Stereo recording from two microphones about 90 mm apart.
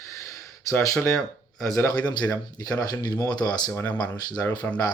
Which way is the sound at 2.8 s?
45° left (ahead or behind).